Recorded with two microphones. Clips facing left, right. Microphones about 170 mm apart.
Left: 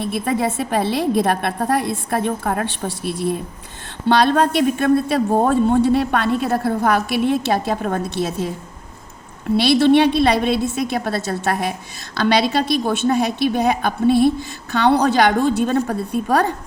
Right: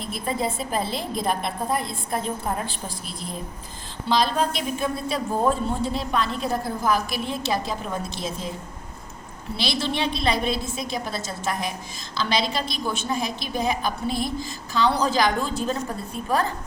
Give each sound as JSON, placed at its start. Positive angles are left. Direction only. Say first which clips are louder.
{"t": 0.1, "sound": "a woman's voice", "louder": "left 4 dB", "side_deg": 70}
{"t": 9.6, "sound": "a man's voice", "louder": "left 13 dB", "side_deg": 60}